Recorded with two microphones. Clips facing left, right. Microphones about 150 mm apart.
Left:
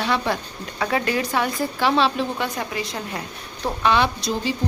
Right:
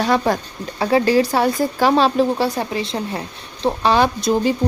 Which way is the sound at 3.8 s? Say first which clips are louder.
Right 3 dB; 40° right (ahead or behind).